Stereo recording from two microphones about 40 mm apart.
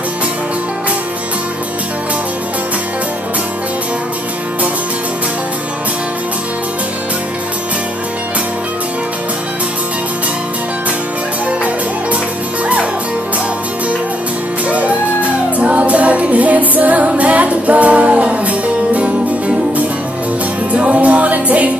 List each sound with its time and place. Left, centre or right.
14.7 s music: right
20.7 s music: right